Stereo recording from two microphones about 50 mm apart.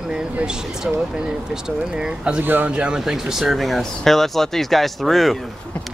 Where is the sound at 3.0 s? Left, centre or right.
Centre.